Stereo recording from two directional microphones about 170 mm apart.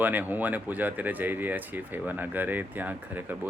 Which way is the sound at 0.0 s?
10° right (ahead or behind).